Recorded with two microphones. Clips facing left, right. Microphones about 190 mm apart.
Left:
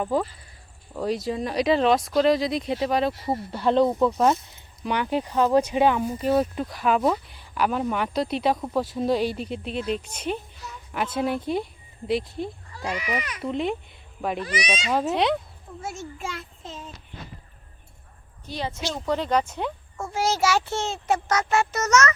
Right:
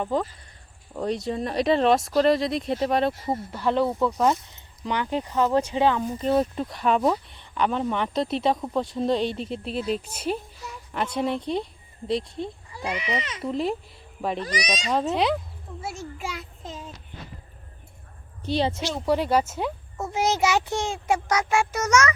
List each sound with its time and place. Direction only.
0.0 s speech: 5° left (ahead or behind)
3.5 s speech: 15° left (ahead or behind)
12.7 s a child's voice: 15° right (ahead or behind)
13.4 s speech: centre (ahead or behind)
14.3 s speech: 40° right (ahead or behind)
14.8 s speech: centre (ahead or behind)
18.5 s a child's voice: 30° right (ahead or behind)
18.9 s a child's voice: 10° right (ahead or behind)
20.0 s a child's voice: 20° right (ahead or behind)